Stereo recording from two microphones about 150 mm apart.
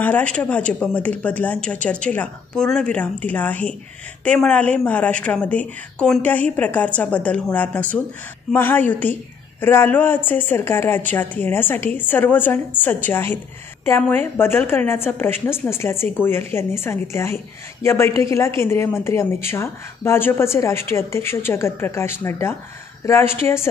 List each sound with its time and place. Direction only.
0.0 s a woman's voice: 10° left (ahead or behind)